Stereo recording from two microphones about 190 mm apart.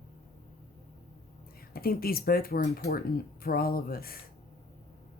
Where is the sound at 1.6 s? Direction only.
50° left (ahead or behind).